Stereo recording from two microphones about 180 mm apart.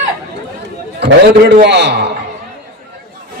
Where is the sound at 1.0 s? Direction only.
65° right (ahead or behind).